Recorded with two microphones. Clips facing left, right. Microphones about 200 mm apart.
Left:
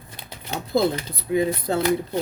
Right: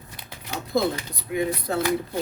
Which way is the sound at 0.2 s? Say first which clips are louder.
Left 2 dB; 25° left (ahead or behind).